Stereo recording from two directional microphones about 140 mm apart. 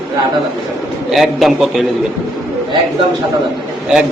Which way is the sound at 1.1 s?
Centre (ahead or behind).